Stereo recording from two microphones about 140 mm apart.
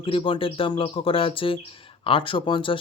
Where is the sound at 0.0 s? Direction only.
40° left (ahead or behind).